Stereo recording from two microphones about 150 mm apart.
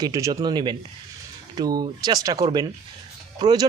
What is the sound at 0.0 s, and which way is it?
Speech, 20° right (ahead or behind).